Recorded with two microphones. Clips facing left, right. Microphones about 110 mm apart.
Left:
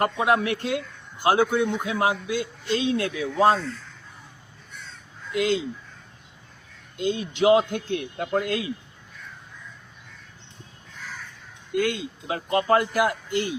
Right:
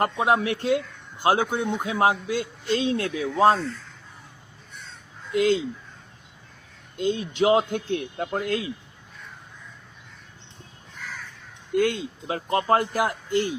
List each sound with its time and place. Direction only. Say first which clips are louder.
0.0 s a man's voice: even; 30° right (ahead or behind)
5.3 s speech: right 3 dB; 35° right (ahead or behind)
7.0 s a man's voice: left 1 dB; 35° right (ahead or behind)
11.8 s a man's voice: right 2 dB; 35° right (ahead or behind)